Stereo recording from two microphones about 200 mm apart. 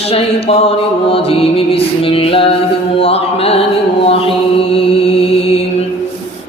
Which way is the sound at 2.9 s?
30° left (ahead or behind).